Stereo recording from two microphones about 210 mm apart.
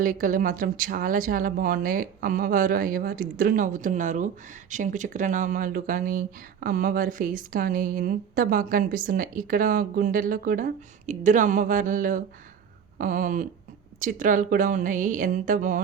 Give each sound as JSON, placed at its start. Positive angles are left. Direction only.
{"t": 0.0, "sound": "speech", "side_deg": -40}